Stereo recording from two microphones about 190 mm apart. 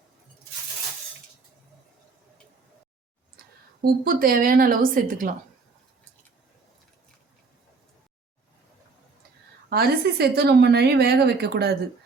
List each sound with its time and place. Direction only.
3.8 s a woman's voice: 50° right (ahead or behind)
9.6 s a woman's voice: 55° right (ahead or behind)